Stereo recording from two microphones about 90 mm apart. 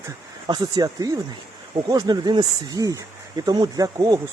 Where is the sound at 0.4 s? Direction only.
55° right (ahead or behind).